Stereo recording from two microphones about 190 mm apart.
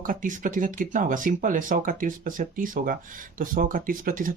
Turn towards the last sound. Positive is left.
turn(degrees=-45)  # may be behind; listen again after turning